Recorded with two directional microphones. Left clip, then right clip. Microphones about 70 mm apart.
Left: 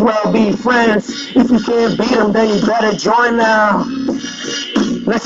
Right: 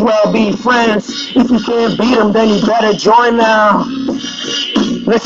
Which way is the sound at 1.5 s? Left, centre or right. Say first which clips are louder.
Right 1 dB; left.